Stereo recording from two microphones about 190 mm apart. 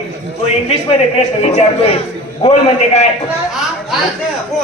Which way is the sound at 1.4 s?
30° left (ahead or behind).